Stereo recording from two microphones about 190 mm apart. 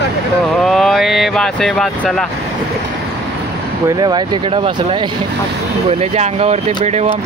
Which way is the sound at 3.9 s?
25° right (ahead or behind).